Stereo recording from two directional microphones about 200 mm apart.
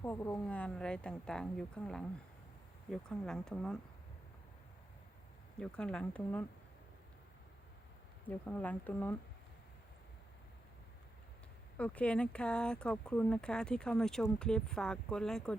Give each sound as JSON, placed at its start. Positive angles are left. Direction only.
{"t": 0.0, "sound": "speech", "side_deg": 10}
{"t": 5.5, "sound": "speech", "side_deg": 5}
{"t": 8.3, "sound": "speech", "side_deg": 10}
{"t": 11.8, "sound": "speech", "side_deg": 5}